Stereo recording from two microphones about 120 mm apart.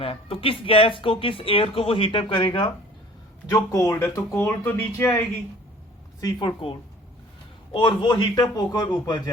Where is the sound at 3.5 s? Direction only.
25° left (ahead or behind).